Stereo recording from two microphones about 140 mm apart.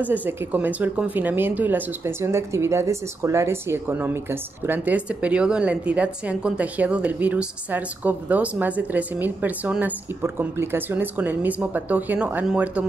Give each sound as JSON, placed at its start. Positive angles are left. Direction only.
{"t": 0.0, "sound": "speech", "side_deg": -10}